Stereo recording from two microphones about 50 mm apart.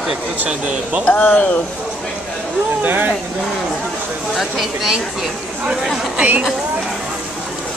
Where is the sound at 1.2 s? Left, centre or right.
Left.